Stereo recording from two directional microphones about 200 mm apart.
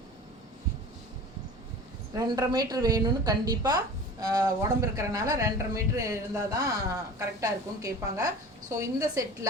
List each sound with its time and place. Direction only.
2.1 s a woman's voice: 20° right (ahead or behind)